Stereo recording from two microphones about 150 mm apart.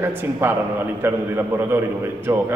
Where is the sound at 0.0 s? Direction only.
15° right (ahead or behind).